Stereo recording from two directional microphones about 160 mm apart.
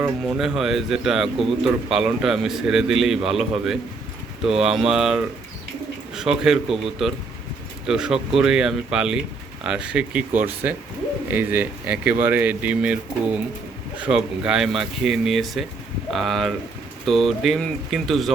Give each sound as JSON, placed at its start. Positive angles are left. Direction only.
{"t": 0.0, "sound": "speech", "side_deg": -5}